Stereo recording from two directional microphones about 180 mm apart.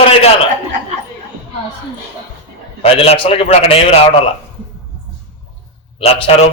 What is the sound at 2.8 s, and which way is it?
A man's voice, 30° left (ahead or behind).